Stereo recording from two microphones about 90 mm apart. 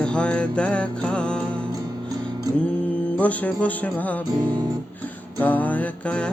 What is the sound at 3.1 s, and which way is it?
Music, 15° left (ahead or behind).